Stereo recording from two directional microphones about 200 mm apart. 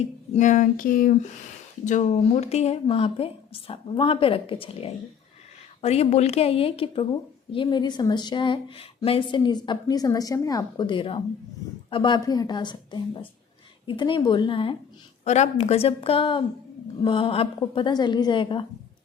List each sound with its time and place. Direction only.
0.3 s female singing: 40° left (ahead or behind)
1.8 s speech: 40° left (ahead or behind)